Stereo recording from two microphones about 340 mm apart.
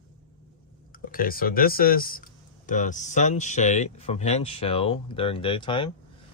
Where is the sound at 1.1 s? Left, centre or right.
Left.